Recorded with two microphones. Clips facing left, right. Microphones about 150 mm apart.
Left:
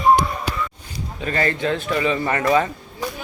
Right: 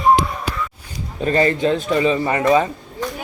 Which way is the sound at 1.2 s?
25° right (ahead or behind).